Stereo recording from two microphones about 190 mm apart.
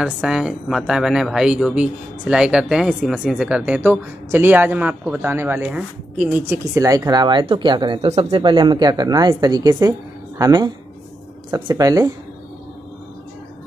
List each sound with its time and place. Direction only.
0.0 s speech: 5° right (ahead or behind)